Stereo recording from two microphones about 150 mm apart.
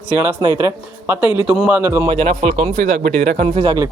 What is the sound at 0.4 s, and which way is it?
Speech, 20° right (ahead or behind).